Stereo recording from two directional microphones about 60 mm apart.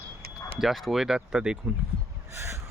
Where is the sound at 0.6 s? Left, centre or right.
Centre.